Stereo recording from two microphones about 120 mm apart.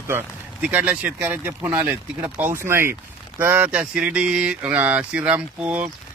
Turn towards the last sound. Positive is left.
turn(degrees=-10)  # may be behind; listen again after turning